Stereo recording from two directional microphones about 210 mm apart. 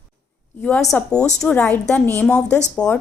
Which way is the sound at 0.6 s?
5° left (ahead or behind).